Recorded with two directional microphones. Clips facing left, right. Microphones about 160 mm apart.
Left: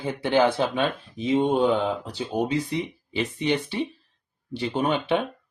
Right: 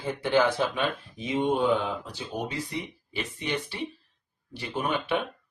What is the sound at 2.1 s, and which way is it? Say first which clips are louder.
Speech: left 8 dB; 20° left (ahead or behind).